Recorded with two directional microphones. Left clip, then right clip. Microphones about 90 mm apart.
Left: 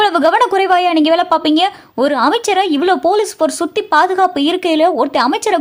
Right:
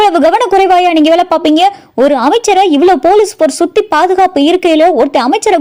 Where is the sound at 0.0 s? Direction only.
30° right (ahead or behind).